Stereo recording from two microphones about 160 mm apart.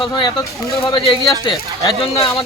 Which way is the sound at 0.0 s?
30° left (ahead or behind).